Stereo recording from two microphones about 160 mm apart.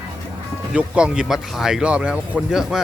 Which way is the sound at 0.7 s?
5° right (ahead or behind).